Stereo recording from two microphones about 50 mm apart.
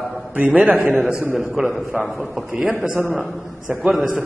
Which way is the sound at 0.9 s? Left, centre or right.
Centre.